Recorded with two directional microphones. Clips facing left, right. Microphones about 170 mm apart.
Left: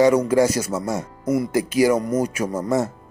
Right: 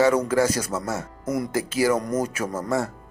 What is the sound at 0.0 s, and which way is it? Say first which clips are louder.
Speech: left 4 dB; 15° left (ahead or behind).